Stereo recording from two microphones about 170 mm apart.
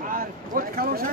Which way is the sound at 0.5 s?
60° right (ahead or behind).